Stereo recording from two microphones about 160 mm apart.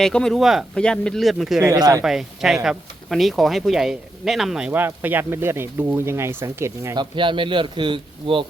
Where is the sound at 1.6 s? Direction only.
20° right (ahead or behind).